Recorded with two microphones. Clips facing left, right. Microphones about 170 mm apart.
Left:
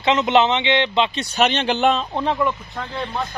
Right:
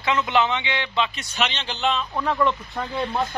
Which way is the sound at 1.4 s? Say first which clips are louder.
Left 7 dB; 55° left (ahead or behind).